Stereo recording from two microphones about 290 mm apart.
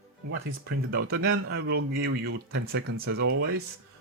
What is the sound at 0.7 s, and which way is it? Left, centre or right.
Speech, right.